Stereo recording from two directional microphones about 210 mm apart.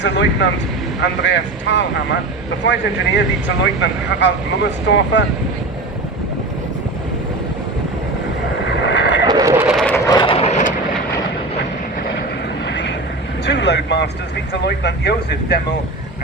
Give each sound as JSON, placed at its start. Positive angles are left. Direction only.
{"t": 0.0, "sound": "speech", "side_deg": 55}
{"t": 8.8, "sound": "vehicle", "side_deg": 55}
{"t": 9.2, "sound": "neigh", "side_deg": -15}
{"t": 9.8, "sound": "vehicle", "side_deg": 15}
{"t": 12.6, "sound": "vehicle", "side_deg": 55}
{"t": 14.6, "sound": "speech", "side_deg": 55}